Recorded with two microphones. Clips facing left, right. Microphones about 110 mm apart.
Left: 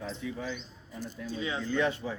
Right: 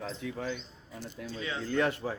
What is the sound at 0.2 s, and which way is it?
Speech, 60° right (ahead or behind).